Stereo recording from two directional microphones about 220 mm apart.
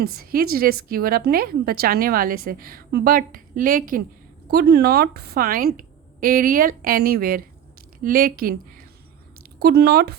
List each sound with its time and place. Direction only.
0.0 s a woman's voice: 45° right (ahead or behind)